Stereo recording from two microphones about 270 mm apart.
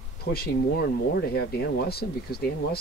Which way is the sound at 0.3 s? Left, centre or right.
Left.